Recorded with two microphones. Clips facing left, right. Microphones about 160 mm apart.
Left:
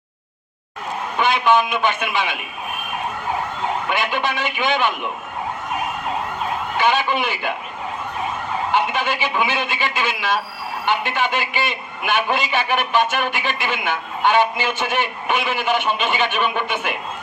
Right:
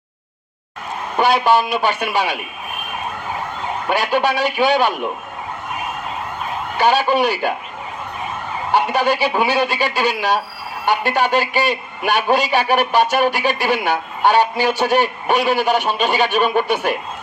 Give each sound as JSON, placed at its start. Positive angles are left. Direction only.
{"t": 1.2, "sound": "a man's voice", "side_deg": -40}
{"t": 3.8, "sound": "a man's voice", "side_deg": -40}
{"t": 6.7, "sound": "a man's voice", "side_deg": -40}
{"t": 8.7, "sound": "a man's voice", "side_deg": -40}